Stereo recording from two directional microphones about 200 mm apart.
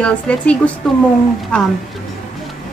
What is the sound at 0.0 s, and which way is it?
Speech, 5° left (ahead or behind).